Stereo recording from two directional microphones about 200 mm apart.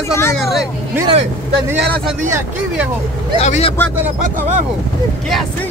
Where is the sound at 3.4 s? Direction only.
35° left (ahead or behind).